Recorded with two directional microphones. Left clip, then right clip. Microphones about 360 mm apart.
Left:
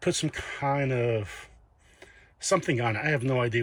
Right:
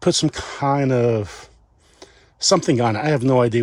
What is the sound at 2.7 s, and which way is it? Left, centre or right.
Speech, right.